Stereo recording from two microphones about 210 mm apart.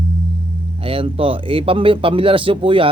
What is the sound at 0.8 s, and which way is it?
A man's voice, 25° right (ahead or behind).